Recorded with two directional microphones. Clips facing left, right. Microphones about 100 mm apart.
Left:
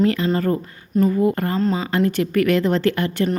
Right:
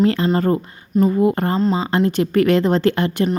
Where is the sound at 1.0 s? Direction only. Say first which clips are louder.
Right 2 dB; 20° right (ahead or behind).